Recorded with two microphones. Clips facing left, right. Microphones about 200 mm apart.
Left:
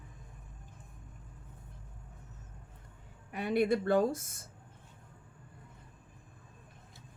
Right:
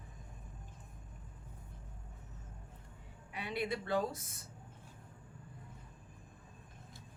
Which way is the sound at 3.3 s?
50° left (ahead or behind).